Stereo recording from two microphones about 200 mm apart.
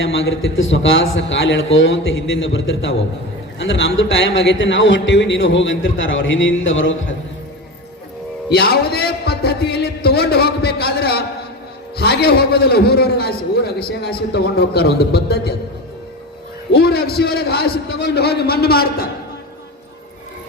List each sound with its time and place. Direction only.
0.0 s a man's voice: 70° left (ahead or behind)
8.4 s a man's voice: 50° left (ahead or behind)
16.7 s a man's voice: 50° left (ahead or behind)